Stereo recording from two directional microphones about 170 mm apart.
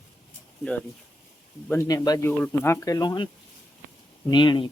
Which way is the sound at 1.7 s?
20° left (ahead or behind).